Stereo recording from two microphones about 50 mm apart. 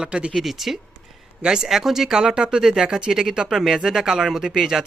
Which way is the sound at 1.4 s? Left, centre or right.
Centre.